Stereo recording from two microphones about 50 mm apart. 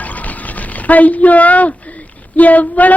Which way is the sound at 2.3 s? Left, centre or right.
Left.